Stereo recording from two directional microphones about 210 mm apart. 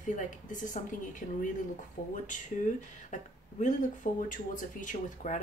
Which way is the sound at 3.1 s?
35° left (ahead or behind).